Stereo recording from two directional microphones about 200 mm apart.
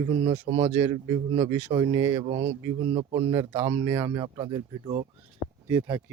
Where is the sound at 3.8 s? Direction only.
10° right (ahead or behind).